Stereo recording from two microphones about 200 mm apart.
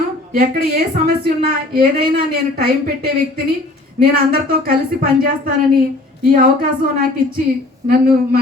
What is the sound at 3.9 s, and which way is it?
Speech, 50° right (ahead or behind).